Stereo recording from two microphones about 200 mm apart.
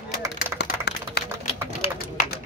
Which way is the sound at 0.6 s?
55° left (ahead or behind).